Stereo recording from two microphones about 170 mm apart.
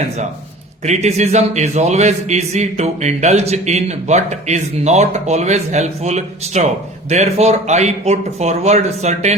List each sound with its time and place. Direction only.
0.9 s a man's voice: 40° right (ahead or behind)